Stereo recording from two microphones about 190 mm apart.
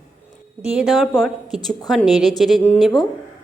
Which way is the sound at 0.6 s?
5° right (ahead or behind).